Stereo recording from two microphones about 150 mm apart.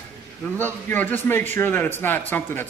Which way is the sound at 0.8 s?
15° left (ahead or behind).